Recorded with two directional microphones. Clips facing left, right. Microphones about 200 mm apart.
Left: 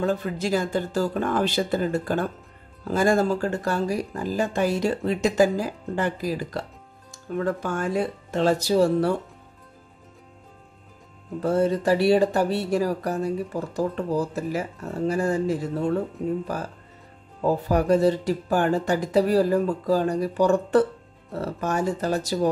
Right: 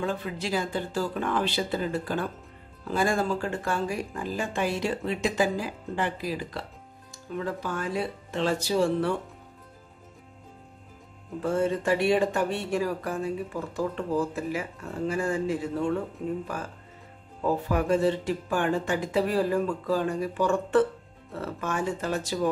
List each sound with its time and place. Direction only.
0.0 s speech: 45° left (ahead or behind)
11.4 s speech: 35° left (ahead or behind)
17.6 s speech: 40° left (ahead or behind)